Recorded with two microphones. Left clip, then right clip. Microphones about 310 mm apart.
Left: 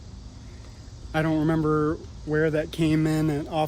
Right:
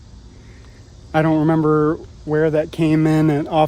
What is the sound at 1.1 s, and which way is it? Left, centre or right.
Speech, right.